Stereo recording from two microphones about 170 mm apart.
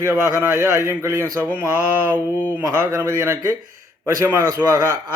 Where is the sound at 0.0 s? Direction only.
15° right (ahead or behind).